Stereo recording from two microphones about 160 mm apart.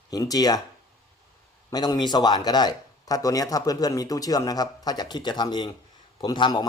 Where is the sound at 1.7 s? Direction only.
25° left (ahead or behind).